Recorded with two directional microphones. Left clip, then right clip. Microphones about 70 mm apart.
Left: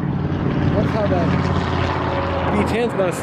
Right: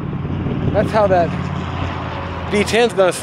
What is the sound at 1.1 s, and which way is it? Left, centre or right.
Vehicle, left.